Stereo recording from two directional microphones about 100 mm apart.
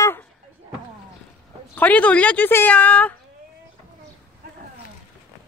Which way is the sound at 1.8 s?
15° left (ahead or behind).